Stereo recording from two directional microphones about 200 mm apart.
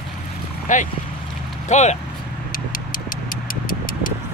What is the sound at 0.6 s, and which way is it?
Speech, 40° left (ahead or behind).